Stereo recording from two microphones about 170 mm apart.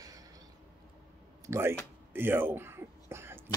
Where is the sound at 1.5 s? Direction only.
15° right (ahead or behind).